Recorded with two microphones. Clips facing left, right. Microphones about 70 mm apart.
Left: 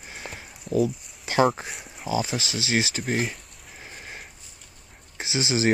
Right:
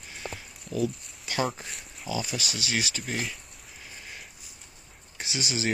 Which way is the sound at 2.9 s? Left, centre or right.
Left.